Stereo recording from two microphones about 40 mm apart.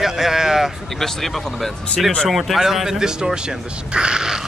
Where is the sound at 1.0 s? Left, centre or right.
Centre.